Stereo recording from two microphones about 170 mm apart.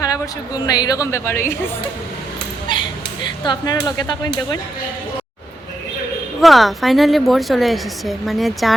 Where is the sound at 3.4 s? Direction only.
25° left (ahead or behind).